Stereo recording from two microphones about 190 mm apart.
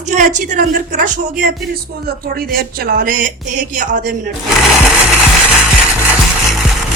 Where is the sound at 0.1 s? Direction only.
40° right (ahead or behind).